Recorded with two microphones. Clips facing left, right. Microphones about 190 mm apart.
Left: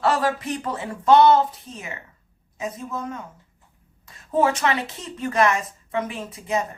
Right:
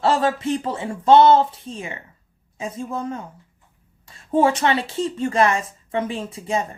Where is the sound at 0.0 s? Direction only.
25° right (ahead or behind).